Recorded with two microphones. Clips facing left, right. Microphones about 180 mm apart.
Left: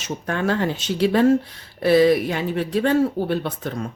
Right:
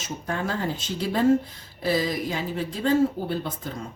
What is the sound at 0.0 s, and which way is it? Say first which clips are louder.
A woman's voice: left 5 dB; 70° left (ahead or behind).